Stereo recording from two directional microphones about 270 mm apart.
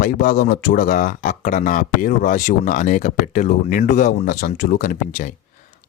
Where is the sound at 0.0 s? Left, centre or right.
Left.